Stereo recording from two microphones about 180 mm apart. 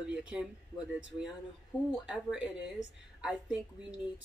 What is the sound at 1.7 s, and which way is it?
Speech, 5° right (ahead or behind).